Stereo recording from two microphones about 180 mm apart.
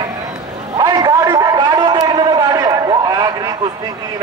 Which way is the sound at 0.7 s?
25° right (ahead or behind).